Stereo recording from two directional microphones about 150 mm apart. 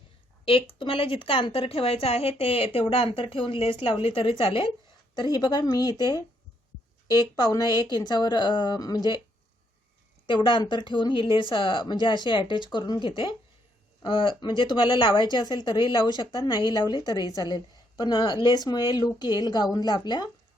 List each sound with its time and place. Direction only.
0.4 s a woman's voice: 35° left (ahead or behind)
10.2 s a woman's voice: 35° left (ahead or behind)